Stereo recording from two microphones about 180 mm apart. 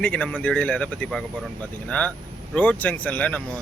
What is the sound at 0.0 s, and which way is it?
Speech, 10° left (ahead or behind).